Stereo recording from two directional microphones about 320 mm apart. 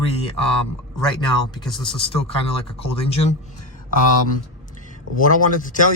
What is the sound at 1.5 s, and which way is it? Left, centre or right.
Speech, centre.